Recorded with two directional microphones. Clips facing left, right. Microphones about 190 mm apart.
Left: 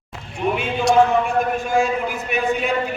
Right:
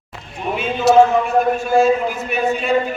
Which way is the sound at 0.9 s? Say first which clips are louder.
Right 4 dB; 5° right (ahead or behind).